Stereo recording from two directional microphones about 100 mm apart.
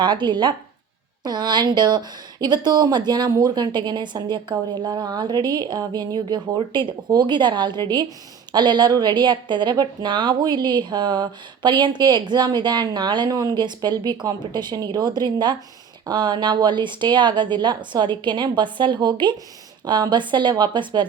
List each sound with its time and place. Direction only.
0.0 s a woman's voice: 50° right (ahead or behind)